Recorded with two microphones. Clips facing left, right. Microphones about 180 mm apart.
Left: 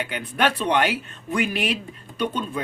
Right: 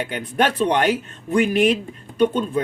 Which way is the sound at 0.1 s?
45° right (ahead or behind).